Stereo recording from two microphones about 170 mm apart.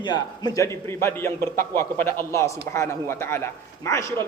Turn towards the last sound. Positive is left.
turn(degrees=15)  # may be behind; listen again after turning